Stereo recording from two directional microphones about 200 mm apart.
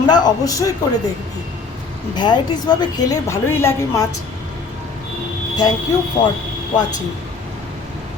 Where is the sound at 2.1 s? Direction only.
20° left (ahead or behind).